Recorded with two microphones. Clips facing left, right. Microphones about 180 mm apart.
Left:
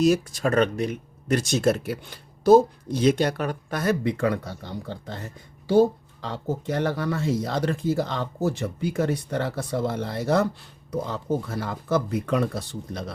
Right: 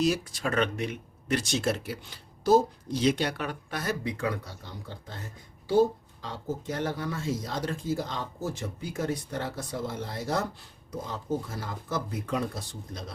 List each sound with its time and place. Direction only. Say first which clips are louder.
0.0 s speech: left 6 dB; 45° left (ahead or behind); by 13.1 s 65° left (ahead or behind)